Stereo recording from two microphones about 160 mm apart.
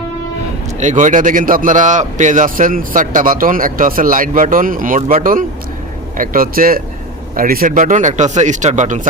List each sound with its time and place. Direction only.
0.8 s a man's voice: 50° right (ahead or behind)